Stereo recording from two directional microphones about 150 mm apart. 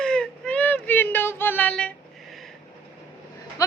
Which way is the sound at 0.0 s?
5° left (ahead or behind).